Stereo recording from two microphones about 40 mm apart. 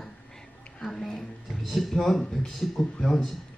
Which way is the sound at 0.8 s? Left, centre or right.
Centre.